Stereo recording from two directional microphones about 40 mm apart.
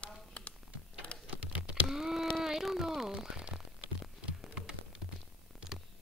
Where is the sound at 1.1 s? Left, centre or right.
Left.